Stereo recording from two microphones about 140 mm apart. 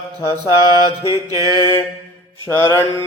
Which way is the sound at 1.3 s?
25° right (ahead or behind).